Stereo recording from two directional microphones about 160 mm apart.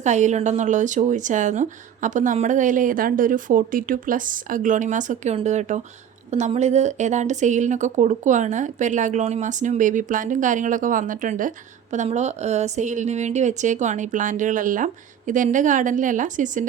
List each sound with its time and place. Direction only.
0.0 s speech: 50° right (ahead or behind)